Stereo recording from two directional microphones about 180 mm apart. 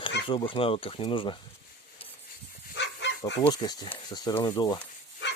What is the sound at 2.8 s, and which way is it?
Bow-wow, 75° left (ahead or behind).